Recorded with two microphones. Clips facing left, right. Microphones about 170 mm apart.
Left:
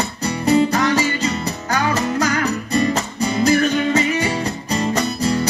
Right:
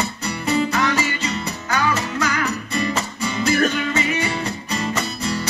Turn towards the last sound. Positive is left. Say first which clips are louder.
# left 6 dB
turn(degrees=40)  # may be behind; listen again after turning